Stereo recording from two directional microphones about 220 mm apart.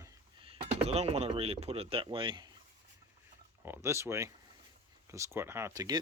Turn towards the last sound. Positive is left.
turn(degrees=-15)  # may be behind; listen again after turning